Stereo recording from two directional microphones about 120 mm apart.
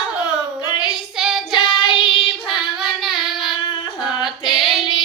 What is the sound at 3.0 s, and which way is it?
Female singing, centre (ahead or behind).